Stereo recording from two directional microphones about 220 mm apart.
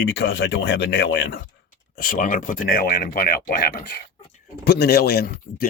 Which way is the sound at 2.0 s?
40° left (ahead or behind).